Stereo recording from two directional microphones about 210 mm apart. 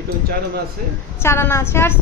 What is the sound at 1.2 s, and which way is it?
Speech, 10° left (ahead or behind).